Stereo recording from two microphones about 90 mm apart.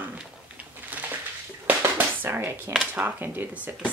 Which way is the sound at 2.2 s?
25° right (ahead or behind).